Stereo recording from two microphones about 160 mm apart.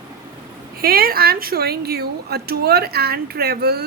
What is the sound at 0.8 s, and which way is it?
A woman's voice, 70° right (ahead or behind).